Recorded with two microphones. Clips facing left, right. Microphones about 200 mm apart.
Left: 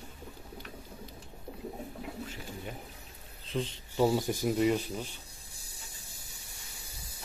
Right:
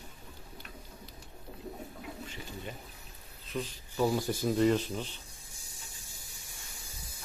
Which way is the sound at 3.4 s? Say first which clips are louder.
Left 3 dB; 25° left (ahead or behind).